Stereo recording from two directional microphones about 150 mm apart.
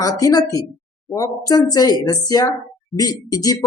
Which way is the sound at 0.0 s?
25° left (ahead or behind).